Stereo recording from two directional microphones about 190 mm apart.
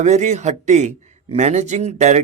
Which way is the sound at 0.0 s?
35° right (ahead or behind).